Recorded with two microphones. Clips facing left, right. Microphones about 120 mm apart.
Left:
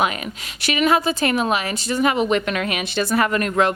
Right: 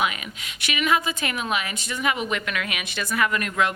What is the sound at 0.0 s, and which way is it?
Speech, 35° left (ahead or behind).